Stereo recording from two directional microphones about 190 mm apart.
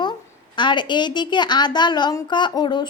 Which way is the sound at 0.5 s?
25° left (ahead or behind).